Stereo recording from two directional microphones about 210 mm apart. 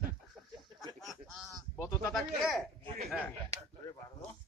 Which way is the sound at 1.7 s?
15° left (ahead or behind).